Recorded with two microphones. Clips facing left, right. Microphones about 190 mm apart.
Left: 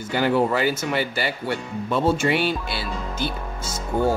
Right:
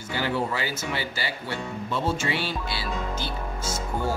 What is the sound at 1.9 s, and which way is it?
Music, 55° left (ahead or behind).